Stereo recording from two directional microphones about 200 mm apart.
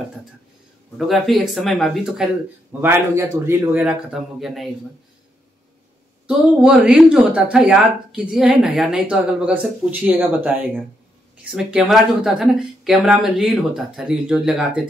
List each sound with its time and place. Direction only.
0.9 s speech: centre (ahead or behind)
2.8 s speech: 10° right (ahead or behind)
6.2 s speech: 5° right (ahead or behind)